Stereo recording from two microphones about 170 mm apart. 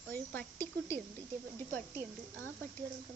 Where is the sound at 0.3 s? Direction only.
10° left (ahead or behind).